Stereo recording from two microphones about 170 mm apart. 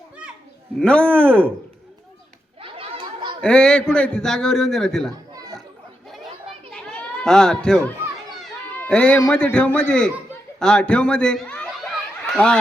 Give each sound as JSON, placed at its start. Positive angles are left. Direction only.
{"t": 0.8, "sound": "speech", "side_deg": 5}
{"t": 2.6, "sound": "children playing", "side_deg": -35}
{"t": 3.4, "sound": "a man's voice", "side_deg": 5}
{"t": 5.3, "sound": "children playing", "side_deg": -20}
{"t": 6.7, "sound": "children playing", "side_deg": 5}
{"t": 8.9, "sound": "a man's voice", "side_deg": 10}